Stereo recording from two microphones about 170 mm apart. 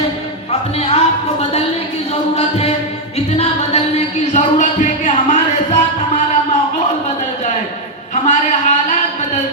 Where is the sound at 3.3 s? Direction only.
40° left (ahead or behind).